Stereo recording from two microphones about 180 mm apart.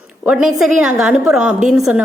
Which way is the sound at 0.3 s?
5° right (ahead or behind).